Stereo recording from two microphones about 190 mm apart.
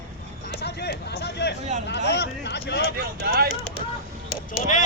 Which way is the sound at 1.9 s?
65° left (ahead or behind).